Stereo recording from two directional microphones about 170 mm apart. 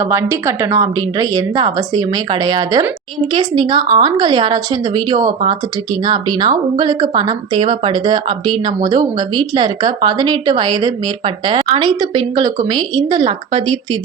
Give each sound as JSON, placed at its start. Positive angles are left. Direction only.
{"t": 0.0, "sound": "speech", "side_deg": -15}